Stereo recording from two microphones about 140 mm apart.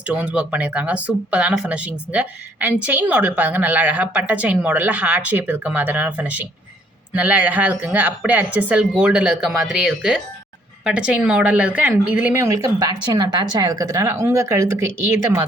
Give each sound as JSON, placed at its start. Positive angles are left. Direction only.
{"t": 0.1, "sound": "speech", "side_deg": -10}